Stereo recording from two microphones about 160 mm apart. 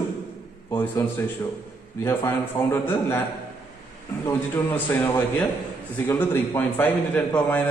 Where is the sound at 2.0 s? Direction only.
15° left (ahead or behind).